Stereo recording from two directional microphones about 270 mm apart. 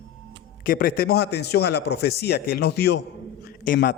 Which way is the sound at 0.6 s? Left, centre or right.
Left.